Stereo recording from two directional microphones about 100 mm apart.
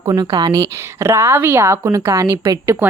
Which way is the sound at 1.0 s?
25° right (ahead or behind).